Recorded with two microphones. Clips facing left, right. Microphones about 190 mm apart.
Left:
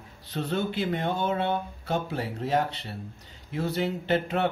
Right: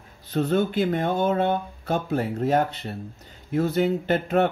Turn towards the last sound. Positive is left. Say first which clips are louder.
# right 4 dB
turn(degrees=-50)  # may be behind; listen again after turning